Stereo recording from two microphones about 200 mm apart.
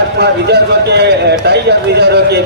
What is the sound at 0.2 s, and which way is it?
A man's voice, 55° right (ahead or behind).